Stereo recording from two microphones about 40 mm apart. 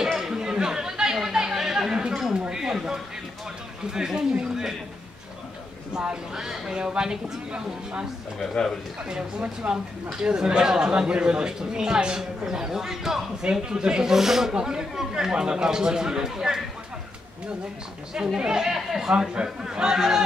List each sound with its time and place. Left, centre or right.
0.0 s chatter: centre
2.3 s a sound: centre
3.9 s speech: centre
5.9 s speech: centre
6.7 s speech: right
10.2 s speech: right
18.1 s speech: centre